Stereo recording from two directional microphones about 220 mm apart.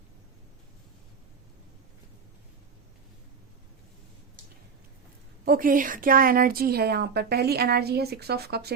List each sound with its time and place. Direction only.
5.5 s a woman's voice: 40° right (ahead or behind)